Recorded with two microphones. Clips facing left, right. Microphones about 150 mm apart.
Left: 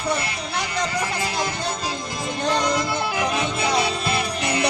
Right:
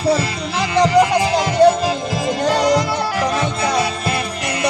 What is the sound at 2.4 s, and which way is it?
Music, 90° right.